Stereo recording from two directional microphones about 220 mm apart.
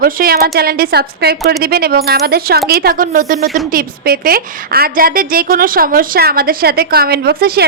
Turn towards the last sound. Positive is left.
turn(degrees=-45)  # may be behind; listen again after turning